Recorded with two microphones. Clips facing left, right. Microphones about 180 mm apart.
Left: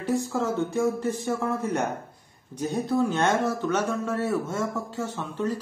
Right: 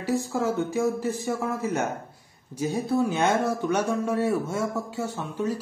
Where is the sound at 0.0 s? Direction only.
5° right (ahead or behind).